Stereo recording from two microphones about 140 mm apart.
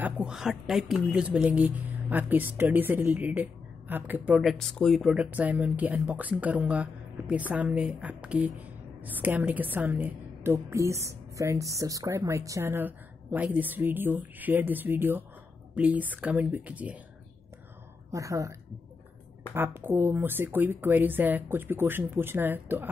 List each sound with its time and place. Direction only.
0.0 s speech: 5° right (ahead or behind)
18.1 s a woman's voice: 25° right (ahead or behind)